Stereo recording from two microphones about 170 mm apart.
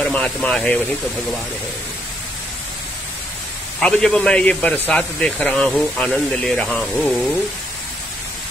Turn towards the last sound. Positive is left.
turn(degrees=0)  # may be behind; listen again after turning